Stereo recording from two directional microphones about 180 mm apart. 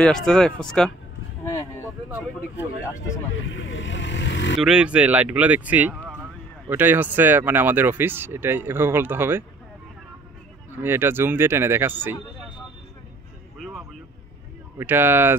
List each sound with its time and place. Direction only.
0.0 s speech: 5° left (ahead or behind)
1.4 s a sound: 15° left (ahead or behind)
3.4 s speech: 90° left
4.6 s speech: 5° right (ahead or behind)
10.7 s speech: 10° right (ahead or behind)
14.8 s speech: 10° right (ahead or behind)